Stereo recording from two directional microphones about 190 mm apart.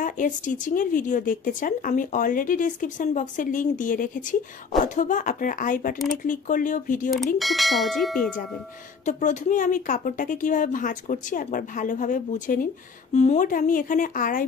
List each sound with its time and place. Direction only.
0.0 s speech: 45° left (ahead or behind)
7.3 s bell: centre (ahead or behind)
9.0 s speech: 40° left (ahead or behind)